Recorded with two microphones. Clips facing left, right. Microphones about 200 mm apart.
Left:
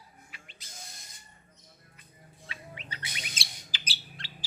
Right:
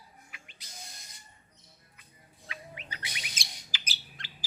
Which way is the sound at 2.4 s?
30° left (ahead or behind).